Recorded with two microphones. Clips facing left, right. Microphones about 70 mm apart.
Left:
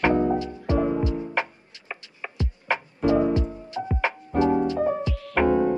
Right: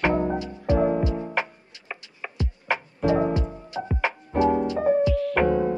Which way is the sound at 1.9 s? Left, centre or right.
Centre.